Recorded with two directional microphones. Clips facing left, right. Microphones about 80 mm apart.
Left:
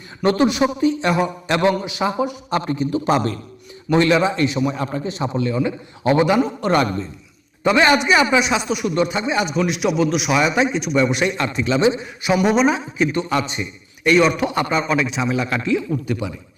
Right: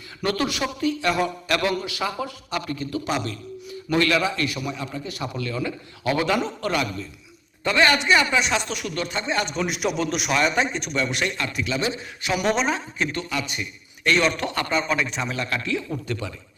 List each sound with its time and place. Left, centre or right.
0.2 s a man's voice: left
3.0 s a man's voice: left
3.9 s a man's voice: left
4.7 s a man's voice: left
5.0 s a man's voice: left
6.2 s a man's voice: centre
6.7 s a man's voice: left
7.6 s a man's voice: centre
10.9 s a man's voice: centre
13.2 s a man's voice: left
14.0 s a man's voice: centre
15.4 s a man's voice: centre